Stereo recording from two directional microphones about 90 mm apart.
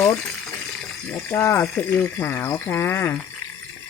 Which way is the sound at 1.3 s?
30° left (ahead or behind).